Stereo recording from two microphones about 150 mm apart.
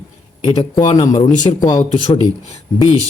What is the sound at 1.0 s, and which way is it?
Speech, 25° left (ahead or behind).